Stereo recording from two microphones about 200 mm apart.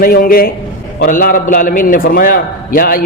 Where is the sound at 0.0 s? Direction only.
45° left (ahead or behind).